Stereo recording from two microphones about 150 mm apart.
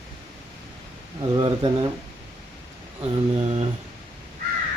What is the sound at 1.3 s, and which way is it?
Speech, 35° right (ahead or behind).